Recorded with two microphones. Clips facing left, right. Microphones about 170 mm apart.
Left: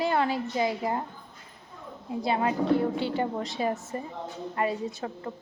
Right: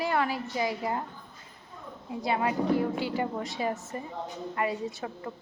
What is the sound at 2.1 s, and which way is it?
A woman's voice, 25° left (ahead or behind).